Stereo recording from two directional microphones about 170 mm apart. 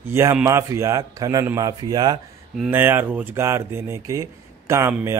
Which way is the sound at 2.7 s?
10° right (ahead or behind).